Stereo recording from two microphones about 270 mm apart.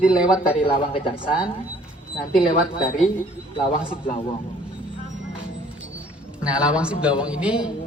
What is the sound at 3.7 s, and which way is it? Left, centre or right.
Speech, centre.